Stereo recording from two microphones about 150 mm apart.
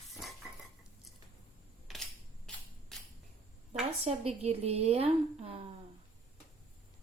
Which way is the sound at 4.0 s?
45° right (ahead or behind).